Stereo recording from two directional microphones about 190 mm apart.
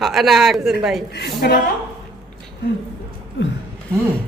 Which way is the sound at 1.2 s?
55° left (ahead or behind).